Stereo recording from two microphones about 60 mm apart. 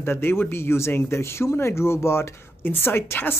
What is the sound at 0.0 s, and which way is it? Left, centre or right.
Speech, left.